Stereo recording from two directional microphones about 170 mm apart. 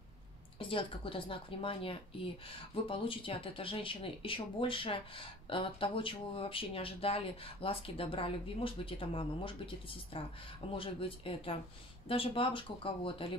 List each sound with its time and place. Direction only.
0.6 s speech: 30° left (ahead or behind)